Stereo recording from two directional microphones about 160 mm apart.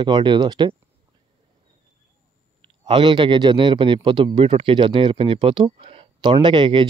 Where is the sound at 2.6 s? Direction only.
30° right (ahead or behind).